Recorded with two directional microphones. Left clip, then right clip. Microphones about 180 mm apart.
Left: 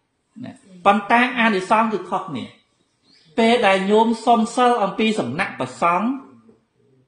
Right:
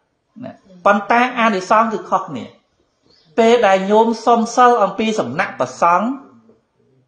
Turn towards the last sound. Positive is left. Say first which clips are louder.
# right 5 dB
turn(degrees=10)  # may be behind; listen again after turning